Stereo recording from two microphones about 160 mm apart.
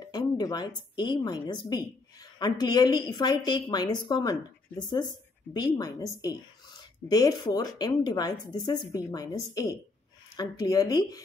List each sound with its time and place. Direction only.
0.0 s a woman's voice: 25° left (ahead or behind)
7.1 s a woman's voice: 25° left (ahead or behind)